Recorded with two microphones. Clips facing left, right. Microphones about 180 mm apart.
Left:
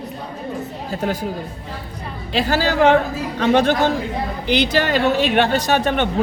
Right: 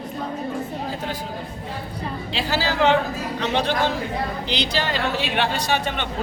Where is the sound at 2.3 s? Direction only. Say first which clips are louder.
Left 6 dB; 45° left (ahead or behind).